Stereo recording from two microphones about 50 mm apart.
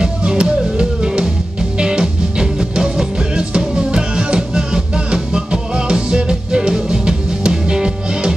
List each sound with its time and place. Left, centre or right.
0.0 s music: centre